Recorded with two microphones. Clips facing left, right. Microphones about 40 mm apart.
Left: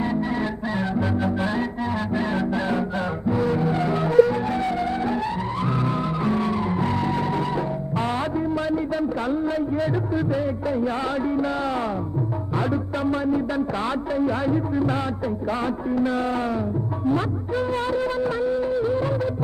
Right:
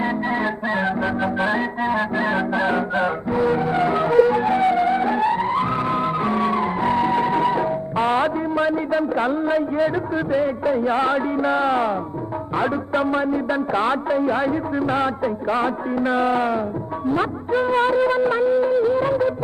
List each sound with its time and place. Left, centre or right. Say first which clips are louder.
0.0 s music: right 3 dB; right
12.5 s a man's voice: right 4 dB; right
13.5 s music: right 4 dB; right
18.4 s music: right 5 dB; right